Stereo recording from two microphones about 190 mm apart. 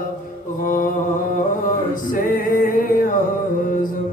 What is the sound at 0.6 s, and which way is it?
Mantra, 45° left (ahead or behind).